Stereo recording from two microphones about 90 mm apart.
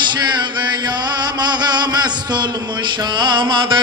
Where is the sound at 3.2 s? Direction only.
65° right (ahead or behind).